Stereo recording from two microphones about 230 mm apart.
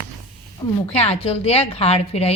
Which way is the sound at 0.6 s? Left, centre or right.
Centre.